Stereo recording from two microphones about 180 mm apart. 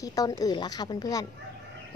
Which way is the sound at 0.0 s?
20° left (ahead or behind).